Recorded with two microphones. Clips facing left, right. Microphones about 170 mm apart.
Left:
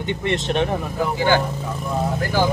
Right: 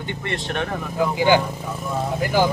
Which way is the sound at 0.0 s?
20° left (ahead or behind).